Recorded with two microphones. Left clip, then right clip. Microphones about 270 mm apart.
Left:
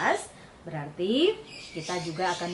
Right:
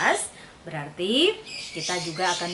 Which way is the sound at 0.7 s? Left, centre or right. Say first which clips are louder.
Right 2 dB; centre.